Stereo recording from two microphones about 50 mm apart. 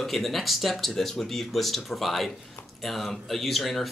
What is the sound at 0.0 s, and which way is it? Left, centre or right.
Speech, centre.